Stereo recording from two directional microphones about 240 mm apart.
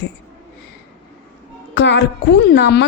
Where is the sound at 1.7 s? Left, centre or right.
Left.